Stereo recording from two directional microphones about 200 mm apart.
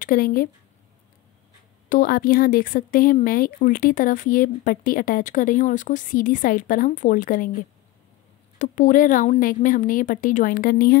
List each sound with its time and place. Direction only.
0.0 s speech: 45° left (ahead or behind)
1.9 s speech: 45° left (ahead or behind)
8.5 s a woman's voice: 40° left (ahead or behind)